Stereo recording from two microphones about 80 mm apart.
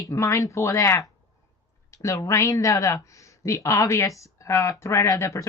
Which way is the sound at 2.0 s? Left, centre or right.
Left.